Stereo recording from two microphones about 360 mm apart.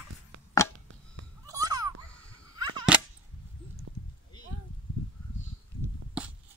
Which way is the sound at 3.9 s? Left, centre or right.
Right.